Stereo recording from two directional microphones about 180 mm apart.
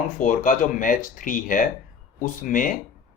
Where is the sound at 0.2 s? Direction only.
45° left (ahead or behind).